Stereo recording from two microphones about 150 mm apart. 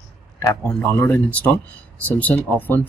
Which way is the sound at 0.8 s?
15° left (ahead or behind).